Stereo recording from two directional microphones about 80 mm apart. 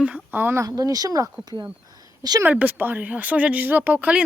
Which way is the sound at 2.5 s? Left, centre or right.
Right.